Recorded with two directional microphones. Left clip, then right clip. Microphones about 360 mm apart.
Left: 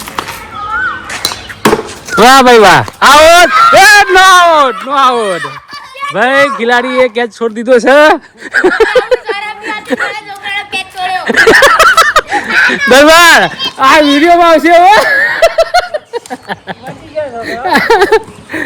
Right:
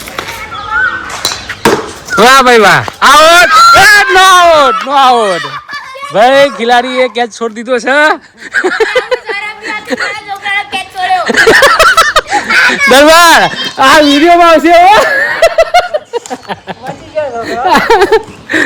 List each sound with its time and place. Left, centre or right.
2.1 s speech: centre
6.6 s a sound: centre
12.5 s fowl: right
12.9 s speech: centre
13.7 s speech: centre
14.2 s speech: centre